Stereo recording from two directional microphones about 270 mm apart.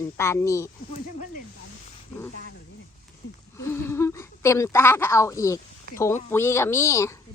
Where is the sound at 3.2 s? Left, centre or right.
Left.